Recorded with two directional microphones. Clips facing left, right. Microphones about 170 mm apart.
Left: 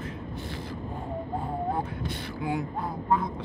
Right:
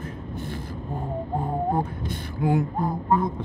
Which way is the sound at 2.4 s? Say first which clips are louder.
Right 7 dB; 45° right (ahead or behind).